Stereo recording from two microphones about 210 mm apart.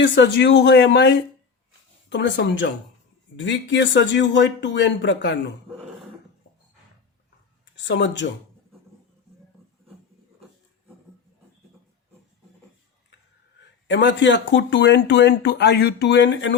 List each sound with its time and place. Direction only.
0.0 s speech: 60° left (ahead or behind)
7.9 s speech: 60° left (ahead or behind)
13.8 s speech: 60° left (ahead or behind)